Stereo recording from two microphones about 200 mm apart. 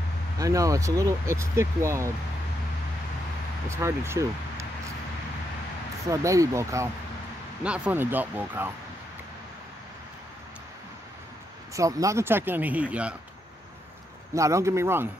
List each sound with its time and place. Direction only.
0.4 s speech: 15° right (ahead or behind)
3.6 s speech: 15° right (ahead or behind)
6.0 s speech: 15° right (ahead or behind)
11.7 s speech: 15° right (ahead or behind)
14.3 s speech: 15° right (ahead or behind)